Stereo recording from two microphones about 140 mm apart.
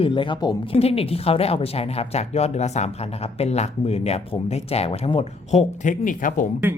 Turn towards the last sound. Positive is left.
turn(degrees=70)  # may be behind; listen again after turning